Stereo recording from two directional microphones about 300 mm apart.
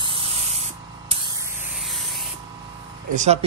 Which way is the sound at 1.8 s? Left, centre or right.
Centre.